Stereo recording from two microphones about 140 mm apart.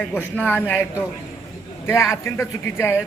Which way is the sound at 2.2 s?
20° left (ahead or behind).